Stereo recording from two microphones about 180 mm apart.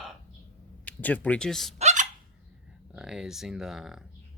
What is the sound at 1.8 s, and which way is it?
Hiccup, 40° right (ahead or behind).